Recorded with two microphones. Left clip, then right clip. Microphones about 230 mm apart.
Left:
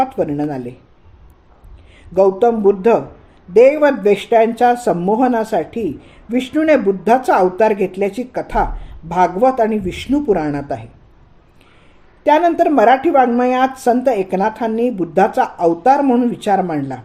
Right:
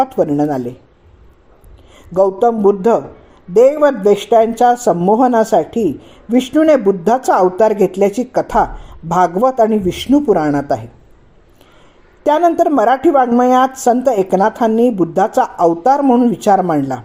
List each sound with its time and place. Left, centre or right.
0.2 s speech: right
2.1 s speech: right
12.2 s speech: right